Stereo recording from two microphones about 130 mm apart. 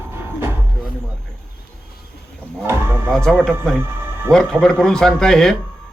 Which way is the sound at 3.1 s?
5° left (ahead or behind).